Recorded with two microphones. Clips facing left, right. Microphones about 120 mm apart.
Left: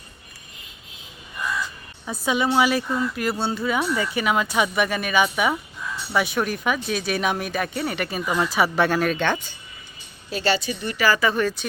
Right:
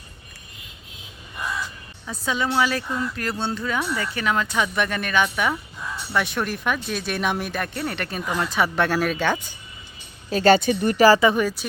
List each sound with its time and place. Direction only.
2.0 s speech: 15° left (ahead or behind); by 9.6 s 5° right (ahead or behind)
10.2 s speech: 45° right (ahead or behind)
11.3 s speech: 10° right (ahead or behind)